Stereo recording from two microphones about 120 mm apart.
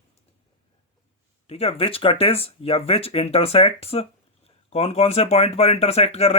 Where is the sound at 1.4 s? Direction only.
55° left (ahead or behind).